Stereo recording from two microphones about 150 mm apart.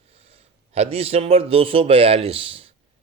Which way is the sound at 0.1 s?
45° right (ahead or behind).